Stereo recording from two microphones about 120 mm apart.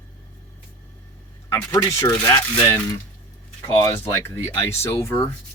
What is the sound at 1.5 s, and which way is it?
Speech, 30° left (ahead or behind).